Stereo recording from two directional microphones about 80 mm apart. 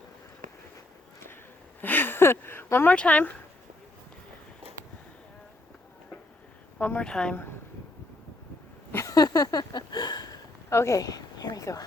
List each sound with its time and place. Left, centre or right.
1.8 s a sound: left
2.6 s speech: left
2.9 s speech: centre
6.7 s speech: left
7.0 s speech: centre
9.0 s a sound: left
10.7 s a woman's voice: left